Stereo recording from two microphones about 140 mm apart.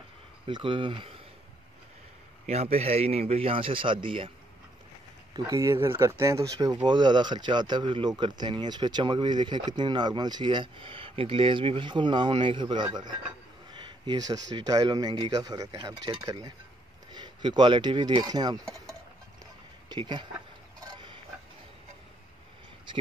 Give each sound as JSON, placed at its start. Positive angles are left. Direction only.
{"t": 0.5, "sound": "speech", "side_deg": -35}
{"t": 2.4, "sound": "a man's voice", "side_deg": -50}
{"t": 5.3, "sound": "speech", "side_deg": -20}
{"t": 19.9, "sound": "speech", "side_deg": -35}
{"t": 20.8, "sound": "a sound", "side_deg": -30}